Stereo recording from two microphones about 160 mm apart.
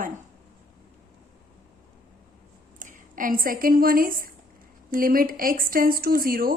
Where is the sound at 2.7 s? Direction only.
55° right (ahead or behind).